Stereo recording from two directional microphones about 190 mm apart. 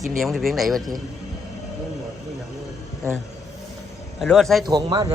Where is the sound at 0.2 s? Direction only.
Centre (ahead or behind).